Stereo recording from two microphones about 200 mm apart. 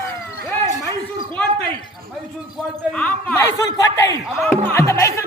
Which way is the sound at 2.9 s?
5° left (ahead or behind).